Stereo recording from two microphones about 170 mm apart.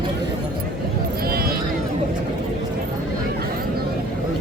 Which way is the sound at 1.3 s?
60° right (ahead or behind).